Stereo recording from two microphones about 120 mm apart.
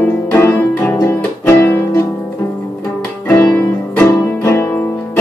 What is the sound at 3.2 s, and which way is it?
Music, 15° left (ahead or behind).